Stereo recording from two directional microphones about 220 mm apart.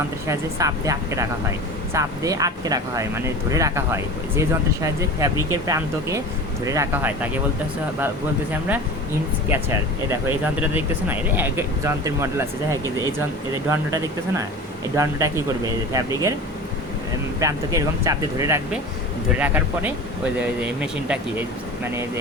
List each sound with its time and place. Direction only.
0.3 s speech: 15° right (ahead or behind)
9.5 s speech: 10° right (ahead or behind)
12.8 s speech: 15° left (ahead or behind)
13.7 s speech: 15° right (ahead or behind)
17.4 s speech: 15° right (ahead or behind)